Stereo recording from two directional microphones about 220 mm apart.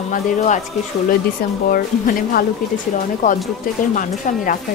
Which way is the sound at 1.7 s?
40° left (ahead or behind).